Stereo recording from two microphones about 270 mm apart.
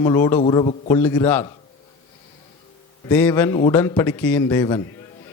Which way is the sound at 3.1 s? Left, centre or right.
Centre.